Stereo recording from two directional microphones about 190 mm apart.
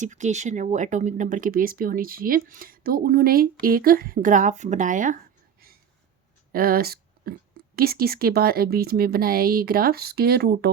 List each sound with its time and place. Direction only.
0.0 s speech: 40° right (ahead or behind); by 10.7 s 55° right (ahead or behind)